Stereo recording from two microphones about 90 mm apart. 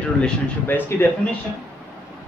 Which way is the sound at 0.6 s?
25° left (ahead or behind).